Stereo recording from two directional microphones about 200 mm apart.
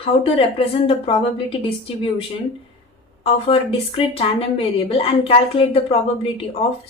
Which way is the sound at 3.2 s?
30° left (ahead or behind).